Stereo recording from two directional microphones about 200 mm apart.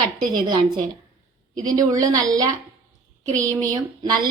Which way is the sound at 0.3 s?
20° right (ahead or behind).